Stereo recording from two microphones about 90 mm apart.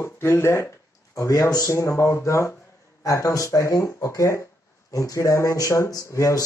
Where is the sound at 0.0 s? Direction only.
30° left (ahead or behind).